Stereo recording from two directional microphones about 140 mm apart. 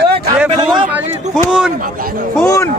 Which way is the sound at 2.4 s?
20° left (ahead or behind).